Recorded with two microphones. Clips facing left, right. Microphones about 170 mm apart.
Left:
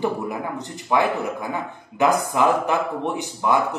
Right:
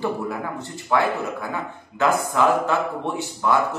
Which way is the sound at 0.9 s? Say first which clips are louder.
Left 1 dB; 15° left (ahead or behind).